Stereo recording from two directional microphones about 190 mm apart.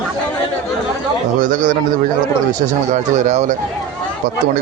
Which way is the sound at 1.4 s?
45° right (ahead or behind).